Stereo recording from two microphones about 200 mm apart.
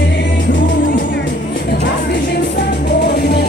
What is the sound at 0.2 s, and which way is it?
Music, 65° left (ahead or behind).